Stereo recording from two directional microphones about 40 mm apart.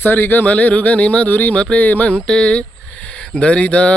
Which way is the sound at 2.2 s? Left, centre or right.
Left.